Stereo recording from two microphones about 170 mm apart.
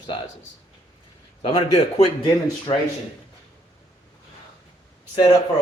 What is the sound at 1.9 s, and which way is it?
Speech, 35° left (ahead or behind).